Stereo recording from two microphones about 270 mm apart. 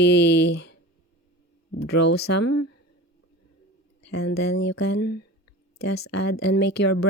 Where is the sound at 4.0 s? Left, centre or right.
Left.